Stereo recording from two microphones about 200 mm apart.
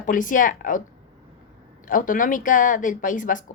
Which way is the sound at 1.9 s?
40° left (ahead or behind).